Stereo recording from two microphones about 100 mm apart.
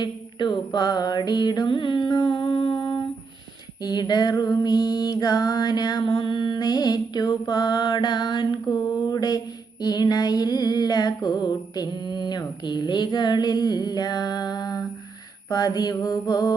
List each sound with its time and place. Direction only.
0.0 s mantra: 45° left (ahead or behind)
3.8 s female singing: 45° left (ahead or behind)
8.6 s mantra: 40° left (ahead or behind)
9.8 s female singing: 45° left (ahead or behind)
15.4 s mantra: 40° left (ahead or behind)